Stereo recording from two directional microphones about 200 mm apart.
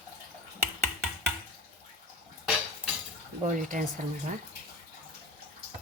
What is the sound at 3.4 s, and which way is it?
Speech, 40° right (ahead or behind).